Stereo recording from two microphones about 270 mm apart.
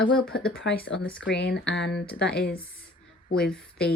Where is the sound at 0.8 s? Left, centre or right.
Left.